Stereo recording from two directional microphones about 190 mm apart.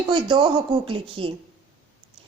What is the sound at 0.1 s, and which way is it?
A woman's voice, 25° right (ahead or behind).